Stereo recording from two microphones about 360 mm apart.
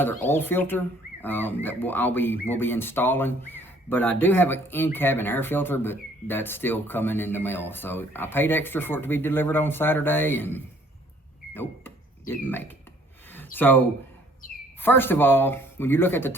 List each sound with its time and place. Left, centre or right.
0.0 s speech: centre
13.3 s a sound: centre
14.4 s bird: left
14.8 s speech: centre